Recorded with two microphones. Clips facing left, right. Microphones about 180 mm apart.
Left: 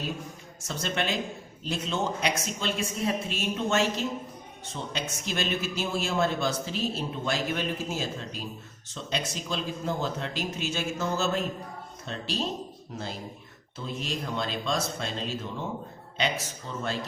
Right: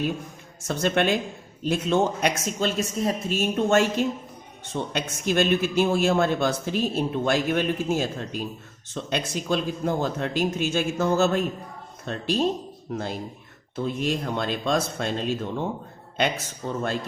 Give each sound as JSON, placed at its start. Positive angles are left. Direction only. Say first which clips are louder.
{"t": 0.7, "sound": "a man's voice", "louder": "right 8 dB", "side_deg": -55}
{"t": 13.7, "sound": "a man's voice", "louder": "right 8 dB", "side_deg": -55}